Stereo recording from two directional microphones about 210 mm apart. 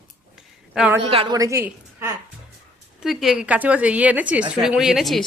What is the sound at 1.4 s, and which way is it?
Speech, 15° right (ahead or behind).